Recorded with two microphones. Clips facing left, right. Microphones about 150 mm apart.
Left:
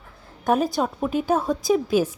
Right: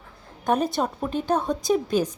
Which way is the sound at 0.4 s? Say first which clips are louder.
Left 2 dB; centre (ahead or behind).